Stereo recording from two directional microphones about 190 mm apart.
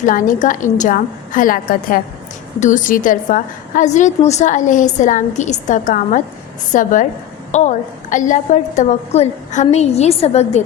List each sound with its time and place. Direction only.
0.0 s a woman's voice: 45° left (ahead or behind)